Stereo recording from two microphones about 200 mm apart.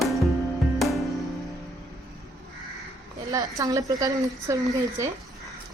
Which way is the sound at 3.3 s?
15° right (ahead or behind).